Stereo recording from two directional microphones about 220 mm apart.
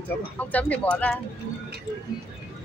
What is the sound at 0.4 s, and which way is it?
Speech, 5° left (ahead or behind).